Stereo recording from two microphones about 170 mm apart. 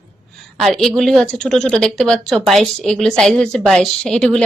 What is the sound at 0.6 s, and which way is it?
A woman's voice, centre (ahead or behind).